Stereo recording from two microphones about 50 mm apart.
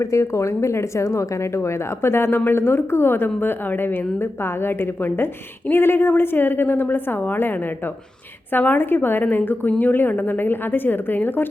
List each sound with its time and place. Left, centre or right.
0.0 s a woman's voice: left
8.5 s a woman's voice: left